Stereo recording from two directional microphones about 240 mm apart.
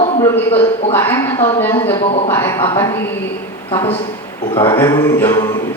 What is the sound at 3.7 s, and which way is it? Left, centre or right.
Speech, left.